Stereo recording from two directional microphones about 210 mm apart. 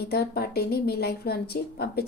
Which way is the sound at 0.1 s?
50° left (ahead or behind).